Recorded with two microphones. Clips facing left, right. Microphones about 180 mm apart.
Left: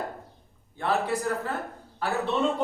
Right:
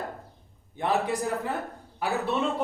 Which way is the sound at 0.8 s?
15° right (ahead or behind).